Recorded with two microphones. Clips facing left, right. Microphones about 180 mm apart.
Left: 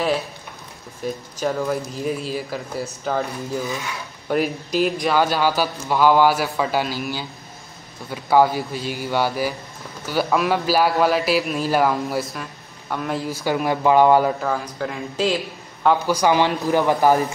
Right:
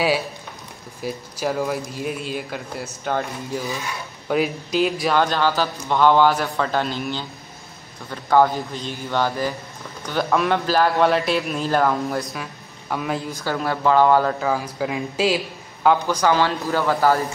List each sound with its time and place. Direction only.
1.0 s a man's voice: 10° right (ahead or behind)
4.3 s a man's voice: centre (ahead or behind)
13.4 s a man's voice: 15° left (ahead or behind)
14.4 s speech: 10° right (ahead or behind)
16.1 s a man's voice: 15° left (ahead or behind)